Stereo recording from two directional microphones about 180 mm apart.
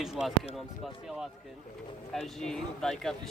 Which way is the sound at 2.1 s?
Centre (ahead or behind).